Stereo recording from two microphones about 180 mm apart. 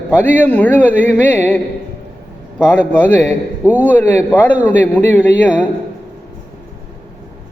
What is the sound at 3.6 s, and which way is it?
Speech, 10° right (ahead or behind).